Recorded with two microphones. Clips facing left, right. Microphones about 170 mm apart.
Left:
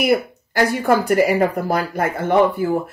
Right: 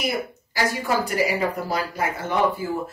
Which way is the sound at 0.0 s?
60° left (ahead or behind).